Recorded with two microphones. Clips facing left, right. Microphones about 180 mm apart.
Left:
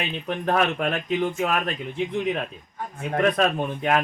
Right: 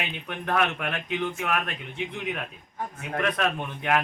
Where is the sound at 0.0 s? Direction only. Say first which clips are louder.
Left 6 dB; 40° left (ahead or behind).